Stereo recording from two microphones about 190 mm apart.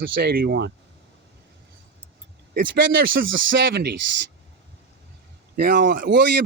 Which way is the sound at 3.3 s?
65° right (ahead or behind).